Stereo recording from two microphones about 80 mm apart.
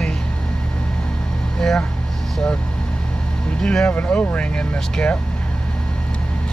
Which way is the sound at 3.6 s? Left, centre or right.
Centre.